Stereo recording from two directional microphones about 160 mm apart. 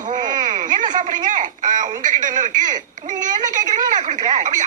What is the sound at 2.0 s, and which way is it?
Speech, 55° right (ahead or behind).